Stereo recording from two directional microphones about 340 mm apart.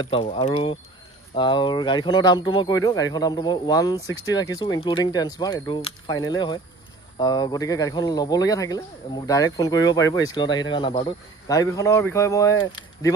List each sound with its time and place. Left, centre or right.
0.0 s speech: centre